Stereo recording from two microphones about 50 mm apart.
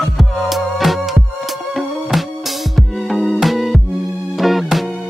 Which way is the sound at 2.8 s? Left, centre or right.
Centre.